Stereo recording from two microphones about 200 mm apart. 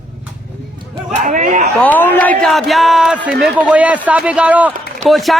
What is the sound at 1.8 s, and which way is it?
A man's voice, 10° left (ahead or behind).